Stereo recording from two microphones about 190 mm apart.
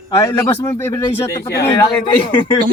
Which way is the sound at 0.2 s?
15° left (ahead or behind).